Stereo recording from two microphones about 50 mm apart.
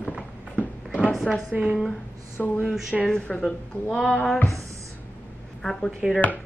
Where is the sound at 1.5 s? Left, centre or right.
Centre.